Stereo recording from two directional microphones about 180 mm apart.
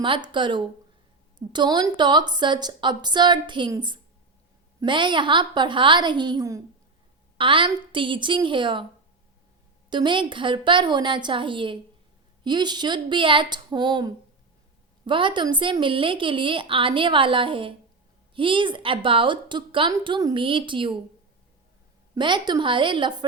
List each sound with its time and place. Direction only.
0.0 s a woman's voice: 25° right (ahead or behind)
9.9 s a woman's voice: 25° right (ahead or behind)
22.1 s a woman's voice: 25° right (ahead or behind)